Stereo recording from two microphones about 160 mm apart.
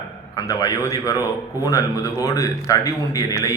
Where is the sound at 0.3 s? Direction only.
20° left (ahead or behind).